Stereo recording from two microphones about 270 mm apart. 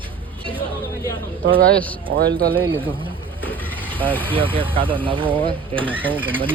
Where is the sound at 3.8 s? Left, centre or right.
Centre.